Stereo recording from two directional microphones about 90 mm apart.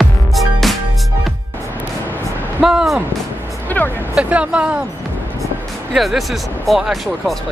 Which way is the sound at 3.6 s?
20° left (ahead or behind).